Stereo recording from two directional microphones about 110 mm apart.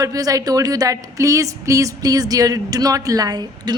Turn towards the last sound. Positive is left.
turn(degrees=-40)  # may be behind; listen again after turning